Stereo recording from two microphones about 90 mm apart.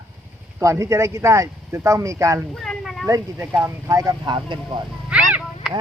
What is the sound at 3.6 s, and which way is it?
Speech, 35° right (ahead or behind).